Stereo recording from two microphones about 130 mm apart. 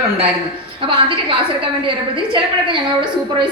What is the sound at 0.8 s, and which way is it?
A woman's voice, 40° right (ahead or behind).